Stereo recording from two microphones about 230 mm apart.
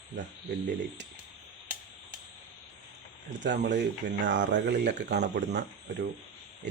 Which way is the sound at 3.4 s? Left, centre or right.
Right.